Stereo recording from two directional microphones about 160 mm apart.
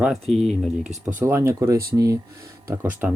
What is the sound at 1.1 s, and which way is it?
Speech, 15° right (ahead or behind).